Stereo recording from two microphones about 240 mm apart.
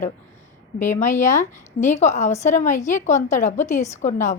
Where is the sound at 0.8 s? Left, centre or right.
Left.